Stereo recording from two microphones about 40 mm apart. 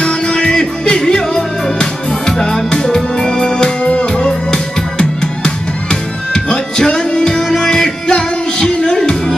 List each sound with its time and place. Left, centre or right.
0.0 s music: left